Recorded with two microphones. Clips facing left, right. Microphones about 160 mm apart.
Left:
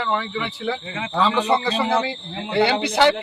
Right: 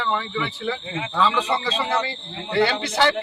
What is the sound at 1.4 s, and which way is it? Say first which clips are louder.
Speech: left 4 dB; 60° left (ahead or behind).